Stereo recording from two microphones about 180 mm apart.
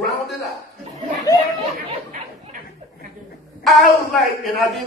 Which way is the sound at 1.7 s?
45° right (ahead or behind).